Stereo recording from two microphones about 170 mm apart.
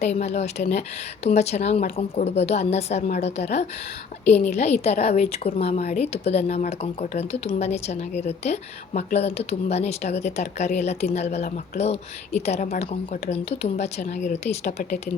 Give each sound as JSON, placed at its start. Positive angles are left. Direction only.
{"t": 0.0, "sound": "a woman's voice", "side_deg": 40}